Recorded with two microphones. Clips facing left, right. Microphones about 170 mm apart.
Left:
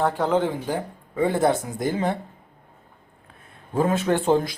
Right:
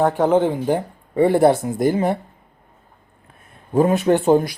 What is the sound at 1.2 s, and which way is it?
Speech, 55° right (ahead or behind).